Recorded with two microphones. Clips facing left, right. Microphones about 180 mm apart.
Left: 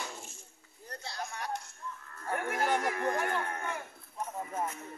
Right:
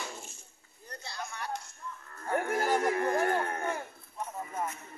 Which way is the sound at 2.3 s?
30° right (ahead or behind).